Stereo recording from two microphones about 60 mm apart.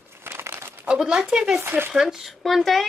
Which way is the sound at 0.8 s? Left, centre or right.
Centre.